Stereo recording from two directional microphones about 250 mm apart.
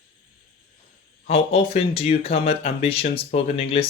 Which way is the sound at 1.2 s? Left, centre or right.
Left.